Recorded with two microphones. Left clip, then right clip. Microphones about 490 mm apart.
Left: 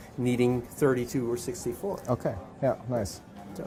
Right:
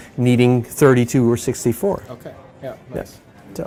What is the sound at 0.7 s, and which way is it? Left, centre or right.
Speech, right.